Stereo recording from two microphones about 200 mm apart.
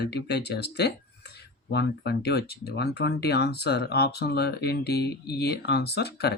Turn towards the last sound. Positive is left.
turn(degrees=55)  # may be behind; listen again after turning